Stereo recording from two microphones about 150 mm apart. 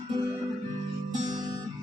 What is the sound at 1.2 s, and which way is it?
Music, 25° right (ahead or behind).